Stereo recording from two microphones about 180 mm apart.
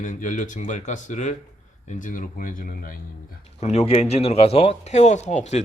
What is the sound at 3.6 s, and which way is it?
Speech, 35° left (ahead or behind).